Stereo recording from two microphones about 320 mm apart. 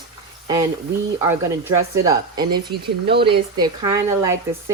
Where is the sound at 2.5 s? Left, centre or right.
Right.